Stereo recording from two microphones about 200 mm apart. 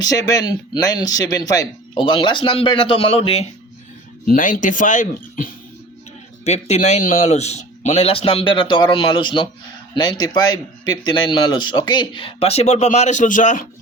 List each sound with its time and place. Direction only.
0.0 s a man's voice: 20° left (ahead or behind)
4.3 s a man's voice: 45° left (ahead or behind)